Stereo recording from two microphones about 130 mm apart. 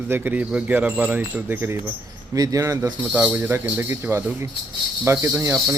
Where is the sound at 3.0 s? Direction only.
15° right (ahead or behind).